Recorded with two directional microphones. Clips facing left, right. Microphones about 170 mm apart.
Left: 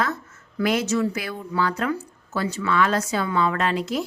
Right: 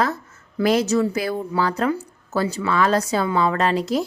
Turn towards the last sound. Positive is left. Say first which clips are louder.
# right 4 dB
turn(degrees=-35)  # may be behind; listen again after turning